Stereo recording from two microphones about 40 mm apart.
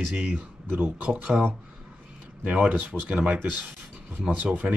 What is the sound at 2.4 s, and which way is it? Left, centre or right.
Speech, right.